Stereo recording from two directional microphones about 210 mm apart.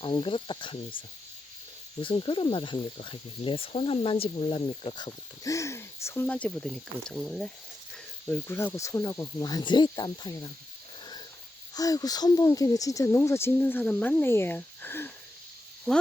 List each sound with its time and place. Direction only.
0.0 s speech: 25° left (ahead or behind)
11.7 s speech: 15° left (ahead or behind)